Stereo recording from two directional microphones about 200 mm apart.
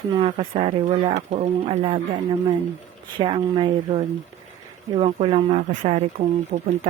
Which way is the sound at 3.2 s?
25° right (ahead or behind).